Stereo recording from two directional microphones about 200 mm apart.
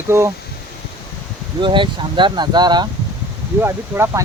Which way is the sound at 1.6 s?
25° right (ahead or behind).